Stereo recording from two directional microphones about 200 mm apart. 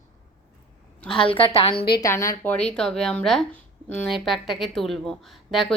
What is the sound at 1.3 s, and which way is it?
Speech, 30° left (ahead or behind).